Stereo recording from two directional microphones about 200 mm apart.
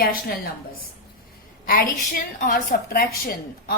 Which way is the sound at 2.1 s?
45° left (ahead or behind).